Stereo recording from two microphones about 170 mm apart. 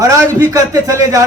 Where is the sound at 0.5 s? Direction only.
20° right (ahead or behind).